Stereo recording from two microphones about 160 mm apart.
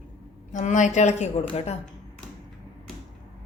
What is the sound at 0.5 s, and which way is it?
A woman's voice, 50° left (ahead or behind).